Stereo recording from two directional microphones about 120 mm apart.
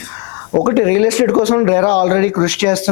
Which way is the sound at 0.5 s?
25° left (ahead or behind).